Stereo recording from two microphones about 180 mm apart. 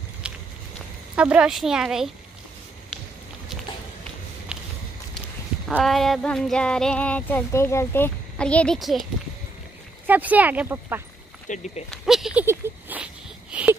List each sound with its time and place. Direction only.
0.2 s a sound: 5° right (ahead or behind)
1.1 s speech: 5° right (ahead or behind)
4.5 s walk: 5° right (ahead or behind)
5.7 s speech: 5° left (ahead or behind)
10.0 s speech: 10° right (ahead or behind)
11.4 s speech: 40° left (ahead or behind)
11.9 s a sound: centre (ahead or behind)